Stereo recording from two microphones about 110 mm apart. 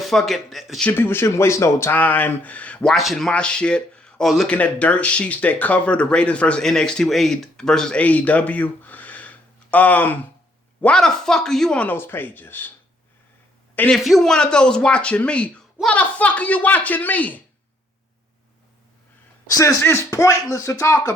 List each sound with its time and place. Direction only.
0.0 s speech: centre (ahead or behind)
0.9 s speech: 20° left (ahead or behind)
13.7 s a man's voice: 10° left (ahead or behind)
14.0 s speech: centre (ahead or behind)
19.5 s speech: 30° left (ahead or behind)